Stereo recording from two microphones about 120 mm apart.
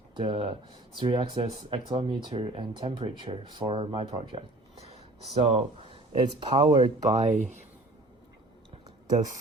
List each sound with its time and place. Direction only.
0.2 s speech: 45° right (ahead or behind)
7.1 s speech: 70° right (ahead or behind)